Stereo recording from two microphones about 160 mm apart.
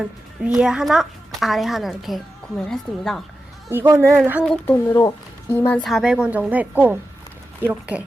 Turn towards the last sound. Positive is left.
turn(degrees=-10)  # may be behind; listen again after turning